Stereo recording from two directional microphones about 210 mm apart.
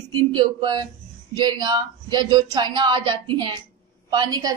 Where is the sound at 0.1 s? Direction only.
20° right (ahead or behind).